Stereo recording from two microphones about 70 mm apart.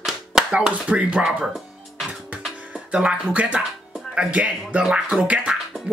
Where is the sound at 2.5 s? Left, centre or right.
Centre.